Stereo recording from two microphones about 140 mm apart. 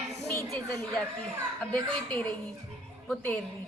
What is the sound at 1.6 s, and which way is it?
Speech, 5° left (ahead or behind).